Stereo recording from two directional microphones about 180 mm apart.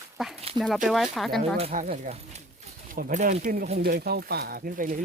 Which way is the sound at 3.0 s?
50° right (ahead or behind).